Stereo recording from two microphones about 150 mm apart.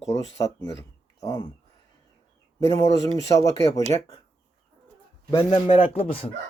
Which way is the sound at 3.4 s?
20° left (ahead or behind).